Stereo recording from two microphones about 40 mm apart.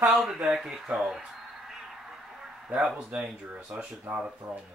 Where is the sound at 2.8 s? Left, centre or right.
Centre.